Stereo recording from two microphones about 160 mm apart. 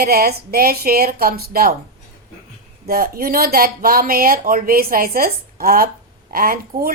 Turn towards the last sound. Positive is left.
turn(degrees=-65)  # may be behind; listen again after turning